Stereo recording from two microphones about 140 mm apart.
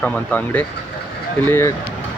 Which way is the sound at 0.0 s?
10° left (ahead or behind).